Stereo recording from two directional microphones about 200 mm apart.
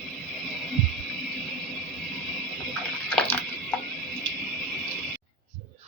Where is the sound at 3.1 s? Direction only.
5° left (ahead or behind).